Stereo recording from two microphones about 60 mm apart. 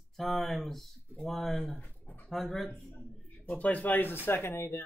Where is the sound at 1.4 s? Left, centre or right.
Centre.